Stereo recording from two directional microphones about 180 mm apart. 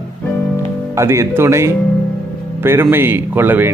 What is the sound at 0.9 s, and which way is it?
Speech, 15° right (ahead or behind).